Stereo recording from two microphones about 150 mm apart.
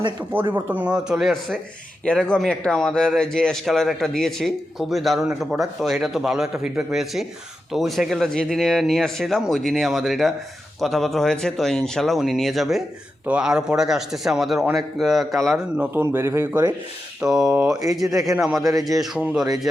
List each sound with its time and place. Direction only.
0.5 s speech: 10° right (ahead or behind)
16.0 s speech: 15° right (ahead or behind)
17.2 s speech: 5° right (ahead or behind)